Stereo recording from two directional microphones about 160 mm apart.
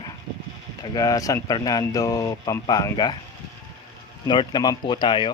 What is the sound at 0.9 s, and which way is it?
Speech, 20° left (ahead or behind).